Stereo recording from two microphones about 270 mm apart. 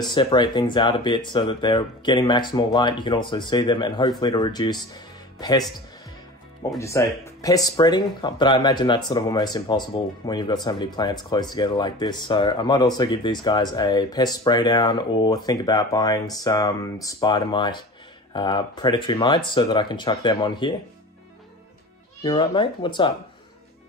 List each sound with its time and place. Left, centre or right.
0.0 s speech: centre
6.8 s speech: centre
22.2 s speech: centre